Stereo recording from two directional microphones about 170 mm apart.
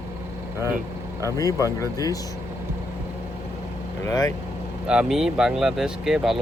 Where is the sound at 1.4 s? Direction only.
20° left (ahead or behind).